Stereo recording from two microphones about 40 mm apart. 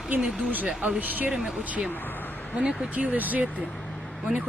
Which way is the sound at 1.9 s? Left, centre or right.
Left.